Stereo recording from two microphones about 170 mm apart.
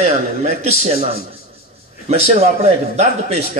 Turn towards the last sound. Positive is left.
turn(degrees=-40)  # may be behind; listen again after turning